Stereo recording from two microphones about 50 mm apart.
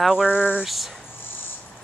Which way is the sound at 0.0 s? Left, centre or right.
Centre.